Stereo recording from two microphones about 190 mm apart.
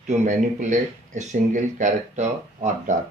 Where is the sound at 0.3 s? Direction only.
40° right (ahead or behind).